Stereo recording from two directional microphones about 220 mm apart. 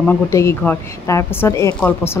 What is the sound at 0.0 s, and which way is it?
A woman's voice, 10° left (ahead or behind).